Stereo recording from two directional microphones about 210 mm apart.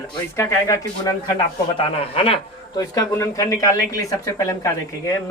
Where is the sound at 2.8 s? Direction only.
15° left (ahead or behind).